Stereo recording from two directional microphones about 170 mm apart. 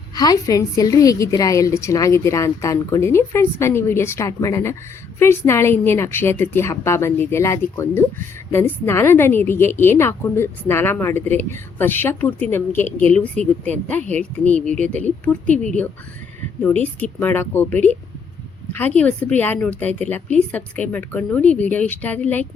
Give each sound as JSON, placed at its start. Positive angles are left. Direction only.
{"t": 0.2, "sound": "a woman's voice", "side_deg": 20}
{"t": 18.9, "sound": "a woman's voice", "side_deg": 10}